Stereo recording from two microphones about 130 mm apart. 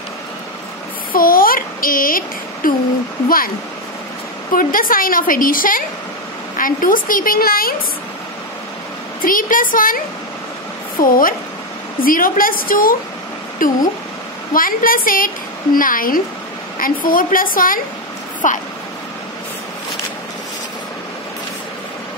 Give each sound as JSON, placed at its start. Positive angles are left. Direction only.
{"t": 1.1, "sound": "a sound", "side_deg": 90}
{"t": 4.6, "sound": "a woman's voice", "side_deg": 90}
{"t": 9.2, "sound": "a woman's voice", "side_deg": 90}
{"t": 11.0, "sound": "a woman's voice", "side_deg": 90}
{"t": 18.4, "sound": "speech", "side_deg": 80}